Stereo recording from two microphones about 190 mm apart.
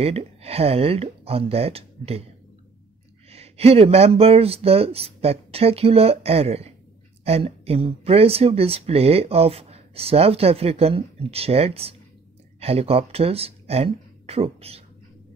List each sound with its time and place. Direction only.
0.0 s speech: 30° right (ahead or behind)
3.3 s speech: 30° right (ahead or behind)